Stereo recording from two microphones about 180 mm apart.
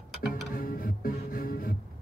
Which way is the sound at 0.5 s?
55° left (ahead or behind).